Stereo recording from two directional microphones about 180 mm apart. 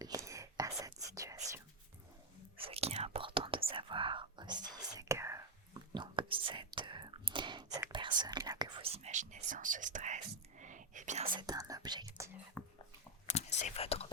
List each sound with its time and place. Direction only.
0.0 s whispering: 20° right (ahead or behind)
2.6 s whispering: 35° right (ahead or behind); by 5.5 s 15° right (ahead or behind)
5.9 s whispering: 25° right (ahead or behind)
8.9 s whispering: 40° right (ahead or behind)
11.3 s whispering: 20° right (ahead or behind)
12.6 s dog: 5° left (ahead or behind)
13.6 s whispering: 35° left (ahead or behind)